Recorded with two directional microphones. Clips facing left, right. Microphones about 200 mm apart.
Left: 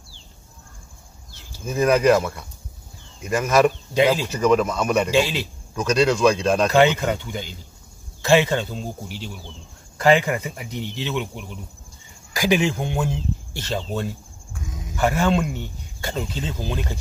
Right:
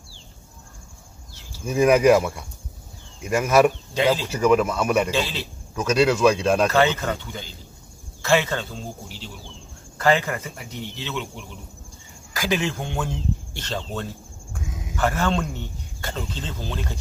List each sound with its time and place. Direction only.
1.6 s speech: 15° right (ahead or behind)
3.9 s speech: 15° left (ahead or behind)
4.3 s speech: 5° right (ahead or behind)
5.1 s speech: 15° left (ahead or behind)
5.8 s speech: 5° right (ahead or behind)
6.7 s speech: 15° left (ahead or behind)
9.9 s speech: 15° left (ahead or behind)